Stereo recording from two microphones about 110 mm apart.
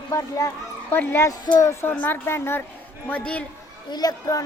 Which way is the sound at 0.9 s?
20° left (ahead or behind).